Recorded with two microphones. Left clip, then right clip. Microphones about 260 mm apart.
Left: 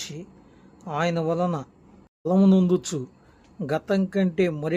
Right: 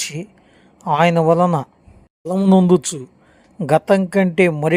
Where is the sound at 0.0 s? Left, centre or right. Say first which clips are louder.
Right 10 dB; right.